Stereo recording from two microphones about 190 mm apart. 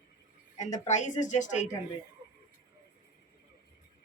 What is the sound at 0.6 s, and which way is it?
A woman's voice, 40° left (ahead or behind).